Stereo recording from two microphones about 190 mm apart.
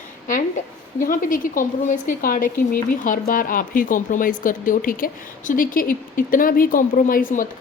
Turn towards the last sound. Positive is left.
turn(degrees=45)  # may be behind; listen again after turning